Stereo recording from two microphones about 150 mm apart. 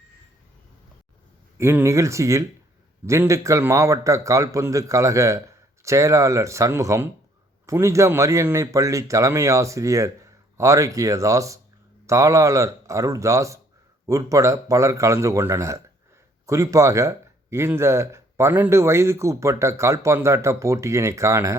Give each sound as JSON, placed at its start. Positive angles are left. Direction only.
{"t": 1.5, "sound": "a man's voice", "side_deg": -20}